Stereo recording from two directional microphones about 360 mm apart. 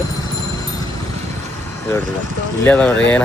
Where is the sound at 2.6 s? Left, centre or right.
Centre.